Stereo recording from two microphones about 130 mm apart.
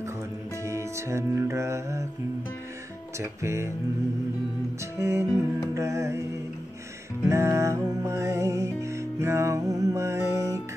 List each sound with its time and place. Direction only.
0.7 s music: 20° right (ahead or behind)
3.2 s music: 20° right (ahead or behind)
4.9 s music: 20° right (ahead or behind)
7.2 s music: 20° right (ahead or behind)